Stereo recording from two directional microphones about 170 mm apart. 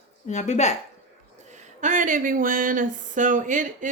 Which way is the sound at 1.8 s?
50° right (ahead or behind).